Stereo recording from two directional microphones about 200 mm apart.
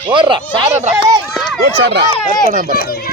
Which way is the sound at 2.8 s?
50° left (ahead or behind).